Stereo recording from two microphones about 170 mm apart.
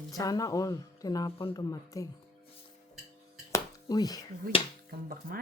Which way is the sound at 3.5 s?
25° left (ahead or behind).